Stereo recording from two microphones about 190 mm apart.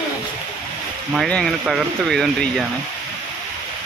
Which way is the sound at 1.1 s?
Centre (ahead or behind).